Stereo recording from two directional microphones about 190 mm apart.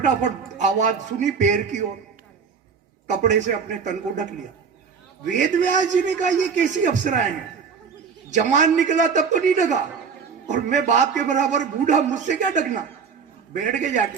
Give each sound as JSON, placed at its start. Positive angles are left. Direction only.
{"t": 0.0, "sound": "a man's voice", "side_deg": -40}
{"t": 3.1, "sound": "a man's voice", "side_deg": -40}
{"t": 8.3, "sound": "a man's voice", "side_deg": -40}